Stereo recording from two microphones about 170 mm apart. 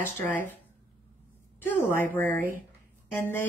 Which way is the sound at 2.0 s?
10° left (ahead or behind).